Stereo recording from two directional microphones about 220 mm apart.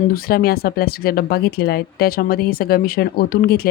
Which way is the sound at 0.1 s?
40° left (ahead or behind).